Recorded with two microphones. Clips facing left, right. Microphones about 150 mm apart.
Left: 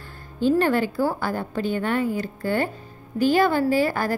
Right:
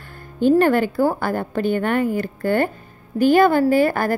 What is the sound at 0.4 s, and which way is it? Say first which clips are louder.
A woman's voice: right 5 dB; 55° right (ahead or behind).